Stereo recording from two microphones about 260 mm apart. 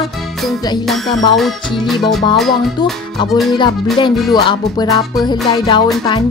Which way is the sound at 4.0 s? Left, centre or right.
Centre.